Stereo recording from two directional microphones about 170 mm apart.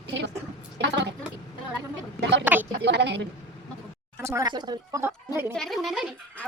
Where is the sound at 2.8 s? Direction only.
85° right.